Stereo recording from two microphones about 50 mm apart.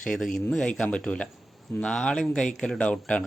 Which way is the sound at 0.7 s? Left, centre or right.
Left.